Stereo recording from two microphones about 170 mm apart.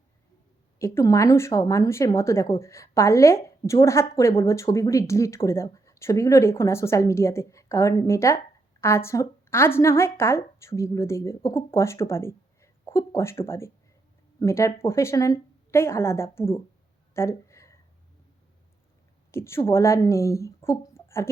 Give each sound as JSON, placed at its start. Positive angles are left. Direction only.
{"t": 0.8, "sound": "speech", "side_deg": 15}
{"t": 17.2, "sound": "a sound", "side_deg": 15}
{"t": 19.3, "sound": "speech", "side_deg": 15}